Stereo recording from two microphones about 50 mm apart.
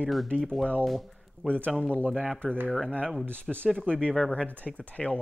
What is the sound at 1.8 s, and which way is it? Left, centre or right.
Speech, left.